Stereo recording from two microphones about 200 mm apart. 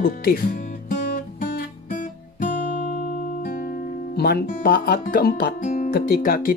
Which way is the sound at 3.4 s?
45° left (ahead or behind).